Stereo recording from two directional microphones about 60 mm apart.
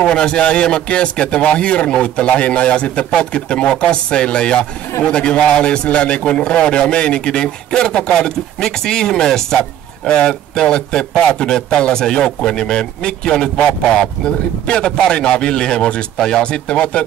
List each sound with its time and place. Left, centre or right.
0.0 s a man's voice: centre